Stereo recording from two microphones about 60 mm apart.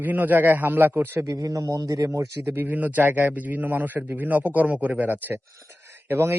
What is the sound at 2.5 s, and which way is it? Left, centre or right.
A man's voice, right.